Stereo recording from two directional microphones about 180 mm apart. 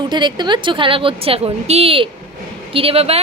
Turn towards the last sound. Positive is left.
turn(degrees=-35)  # may be behind; listen again after turning